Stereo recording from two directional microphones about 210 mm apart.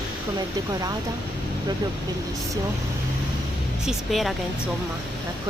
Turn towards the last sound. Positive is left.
turn(degrees=0)  # may be behind; listen again after turning